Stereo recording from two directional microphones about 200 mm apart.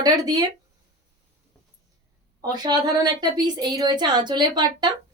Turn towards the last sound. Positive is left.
turn(degrees=-20)  # may be behind; listen again after turning